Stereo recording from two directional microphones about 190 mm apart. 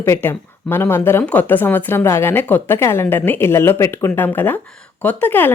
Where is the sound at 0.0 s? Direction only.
10° left (ahead or behind).